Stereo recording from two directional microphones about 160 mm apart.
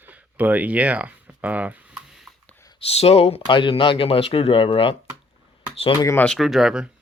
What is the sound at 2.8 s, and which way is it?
Speech, 40° left (ahead or behind).